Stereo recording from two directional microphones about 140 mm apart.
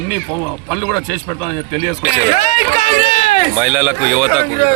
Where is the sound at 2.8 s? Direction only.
50° left (ahead or behind).